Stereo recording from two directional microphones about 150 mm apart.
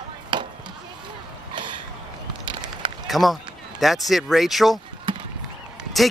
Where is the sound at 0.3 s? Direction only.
30° right (ahead or behind).